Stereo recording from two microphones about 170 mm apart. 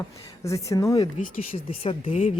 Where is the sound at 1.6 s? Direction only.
35° left (ahead or behind).